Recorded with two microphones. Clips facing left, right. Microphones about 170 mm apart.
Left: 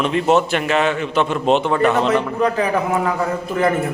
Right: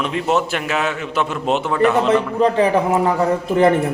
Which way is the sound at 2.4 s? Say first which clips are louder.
Right 3 dB; 30° right (ahead or behind).